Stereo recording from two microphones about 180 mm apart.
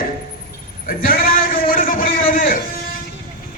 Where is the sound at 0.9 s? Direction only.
50° left (ahead or behind).